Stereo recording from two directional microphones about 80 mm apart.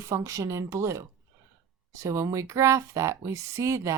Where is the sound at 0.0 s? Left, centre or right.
Right.